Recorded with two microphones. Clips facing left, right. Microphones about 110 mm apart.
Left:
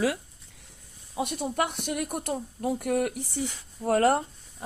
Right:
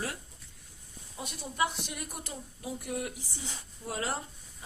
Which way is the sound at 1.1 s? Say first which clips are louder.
Left 11 dB; 65° left (ahead or behind).